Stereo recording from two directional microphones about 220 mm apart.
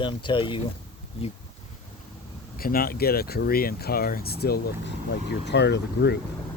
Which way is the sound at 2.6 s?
40° left (ahead or behind).